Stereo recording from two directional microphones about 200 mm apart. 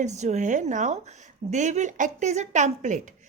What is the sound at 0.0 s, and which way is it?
Speech, 35° right (ahead or behind).